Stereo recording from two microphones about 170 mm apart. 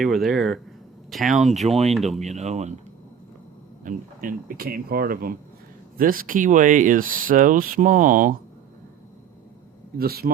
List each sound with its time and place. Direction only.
0.0 s speech: centre (ahead or behind)
2.2 s speech: 40° right (ahead or behind)
3.8 s speech: 55° right (ahead or behind)
10.0 s speech: 65° right (ahead or behind)